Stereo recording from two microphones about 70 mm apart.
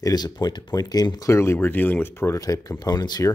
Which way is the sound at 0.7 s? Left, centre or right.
Left.